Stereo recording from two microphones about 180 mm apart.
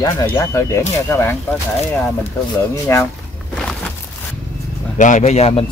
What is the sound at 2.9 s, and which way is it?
Speech, 15° left (ahead or behind).